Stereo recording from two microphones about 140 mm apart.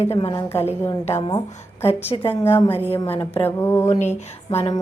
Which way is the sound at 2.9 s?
15° left (ahead or behind).